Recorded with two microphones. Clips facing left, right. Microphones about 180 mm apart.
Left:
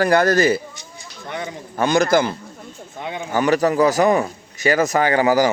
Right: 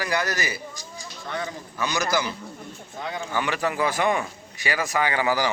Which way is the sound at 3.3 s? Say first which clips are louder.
Left 10 dB; 40° left (ahead or behind).